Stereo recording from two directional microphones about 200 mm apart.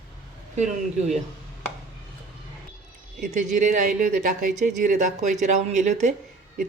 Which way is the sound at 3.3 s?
40° right (ahead or behind).